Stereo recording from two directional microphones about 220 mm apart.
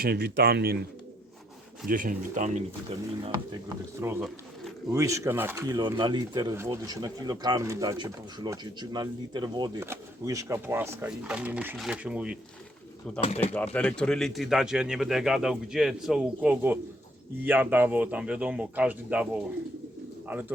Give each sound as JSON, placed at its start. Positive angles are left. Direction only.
{"t": 0.0, "sound": "speech", "side_deg": -45}
{"t": 1.9, "sound": "speech", "side_deg": -40}
{"t": 4.0, "sound": "speech", "side_deg": -10}
{"t": 13.2, "sound": "speech", "side_deg": 25}
{"t": 13.7, "sound": "speech", "side_deg": 5}